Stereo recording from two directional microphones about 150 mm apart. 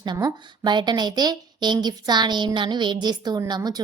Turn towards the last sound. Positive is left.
turn(degrees=-25)  # may be behind; listen again after turning